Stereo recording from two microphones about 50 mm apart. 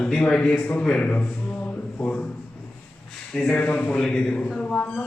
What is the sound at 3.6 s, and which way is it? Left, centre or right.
Speech, left.